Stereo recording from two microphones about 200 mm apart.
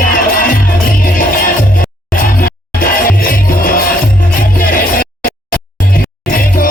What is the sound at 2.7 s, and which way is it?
Music, 45° left (ahead or behind).